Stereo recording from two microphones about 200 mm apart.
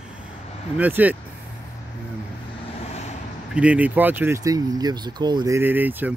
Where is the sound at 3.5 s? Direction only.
5° right (ahead or behind).